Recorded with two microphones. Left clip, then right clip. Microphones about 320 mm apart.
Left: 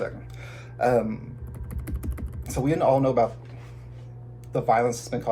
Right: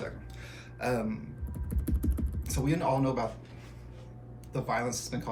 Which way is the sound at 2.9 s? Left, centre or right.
Centre.